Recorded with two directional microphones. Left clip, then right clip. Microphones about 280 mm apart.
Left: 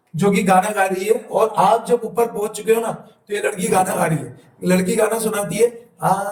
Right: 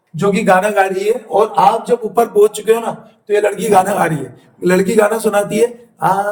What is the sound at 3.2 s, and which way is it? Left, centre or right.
A man's voice, centre.